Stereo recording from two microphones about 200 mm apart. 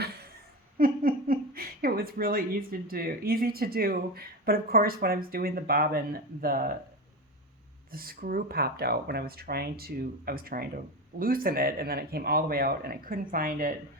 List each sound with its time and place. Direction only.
0.8 s speech: 45° right (ahead or behind)
7.9 s speech: 45° right (ahead or behind)